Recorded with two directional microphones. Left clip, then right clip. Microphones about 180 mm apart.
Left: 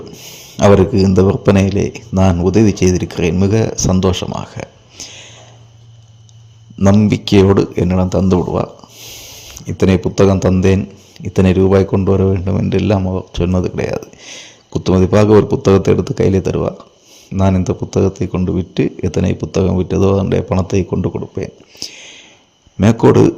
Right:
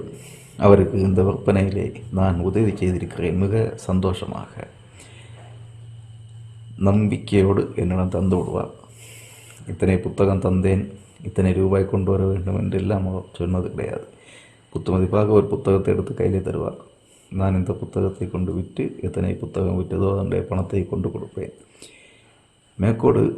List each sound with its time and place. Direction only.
0.5 s speech: 35° left (ahead or behind)
6.7 s speech: 25° left (ahead or behind)
9.6 s speech: 35° left (ahead or behind)